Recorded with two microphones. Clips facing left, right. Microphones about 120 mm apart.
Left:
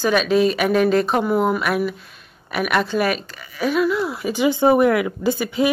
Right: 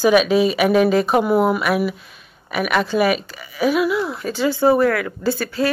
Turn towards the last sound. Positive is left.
turn(degrees=15)  # may be behind; listen again after turning